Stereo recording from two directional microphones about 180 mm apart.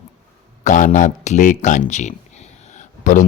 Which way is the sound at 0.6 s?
45° left (ahead or behind).